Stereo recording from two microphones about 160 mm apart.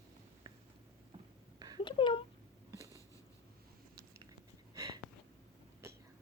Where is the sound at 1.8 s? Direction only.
30° left (ahead or behind).